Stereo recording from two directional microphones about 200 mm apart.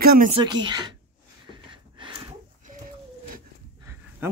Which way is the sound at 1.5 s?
25° right (ahead or behind).